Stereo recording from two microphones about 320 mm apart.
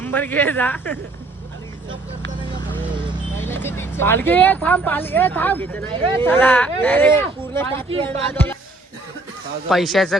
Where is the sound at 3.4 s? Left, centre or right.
Centre.